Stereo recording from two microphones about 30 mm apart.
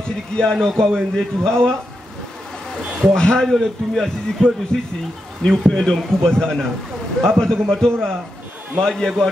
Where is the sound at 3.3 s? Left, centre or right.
Centre.